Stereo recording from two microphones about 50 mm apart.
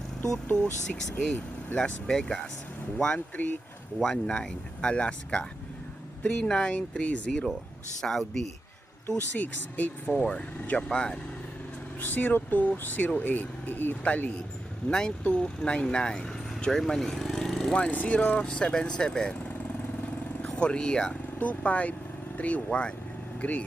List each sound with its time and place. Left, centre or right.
0.5 s speech: centre
3.3 s speech: left
4.0 s speech: centre
8.0 s speech: centre
9.4 s speech: left
11.9 s speech: left
14.0 s speech: left
14.8 s speech: centre
15.2 s speech: left; by 17.7 s centre
17.9 s speech: left
18.2 s speech: left
20.6 s speech: centre
21.3 s speech: left